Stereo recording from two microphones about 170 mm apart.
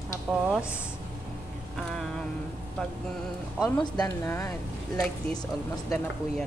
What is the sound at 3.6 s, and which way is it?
Speech, 25° left (ahead or behind).